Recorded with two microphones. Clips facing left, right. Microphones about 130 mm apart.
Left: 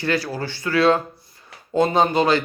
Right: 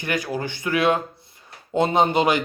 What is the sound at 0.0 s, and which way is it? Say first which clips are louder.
A man's voice: left 2 dB; 15° right (ahead or behind).